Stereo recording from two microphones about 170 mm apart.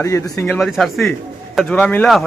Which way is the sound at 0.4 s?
5° left (ahead or behind).